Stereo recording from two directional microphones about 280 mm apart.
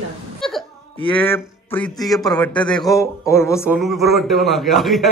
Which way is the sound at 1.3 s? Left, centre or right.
Centre.